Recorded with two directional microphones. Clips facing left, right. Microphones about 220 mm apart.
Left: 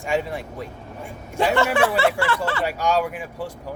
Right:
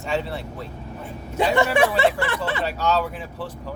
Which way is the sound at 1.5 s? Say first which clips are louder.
Right 1 dB; 15° right (ahead or behind).